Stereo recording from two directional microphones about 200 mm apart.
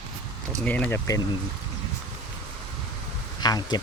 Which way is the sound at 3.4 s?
20° left (ahead or behind).